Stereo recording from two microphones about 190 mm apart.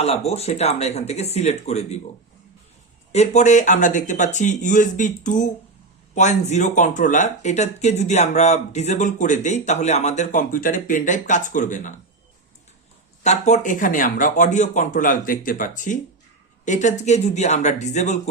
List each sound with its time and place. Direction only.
0.0 s speech: 30° left (ahead or behind)
3.1 s speech: 35° left (ahead or behind)
13.2 s speech: 35° left (ahead or behind)